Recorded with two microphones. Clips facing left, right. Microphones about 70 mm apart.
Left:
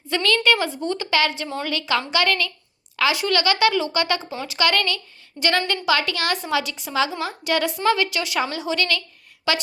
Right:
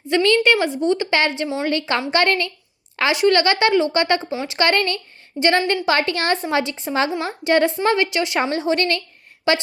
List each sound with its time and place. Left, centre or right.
0.1 s a woman's voice: right